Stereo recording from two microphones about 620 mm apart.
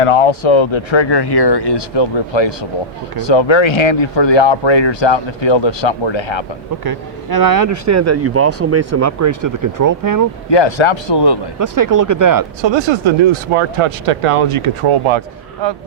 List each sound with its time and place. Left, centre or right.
0.0 s speech: left
6.8 s speech: right
10.5 s a man's voice: left
11.6 s speech: right
12.6 s speech: right